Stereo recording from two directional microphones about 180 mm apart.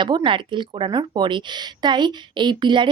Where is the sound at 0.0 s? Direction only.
25° right (ahead or behind).